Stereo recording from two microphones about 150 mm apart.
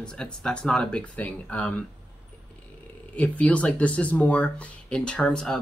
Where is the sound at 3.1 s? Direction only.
10° left (ahead or behind).